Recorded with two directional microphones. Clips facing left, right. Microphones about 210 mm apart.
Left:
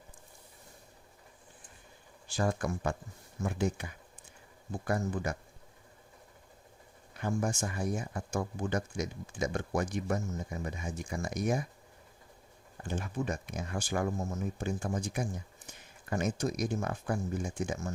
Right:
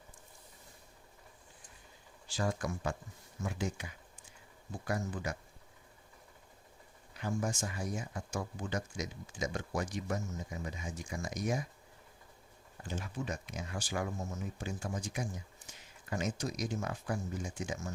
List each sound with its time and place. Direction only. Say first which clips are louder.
2.2 s speech: left 4 dB; 55° left (ahead or behind)
7.2 s speech: left 3 dB; 55° left (ahead or behind)
12.8 s speech: left 5 dB; 50° left (ahead or behind)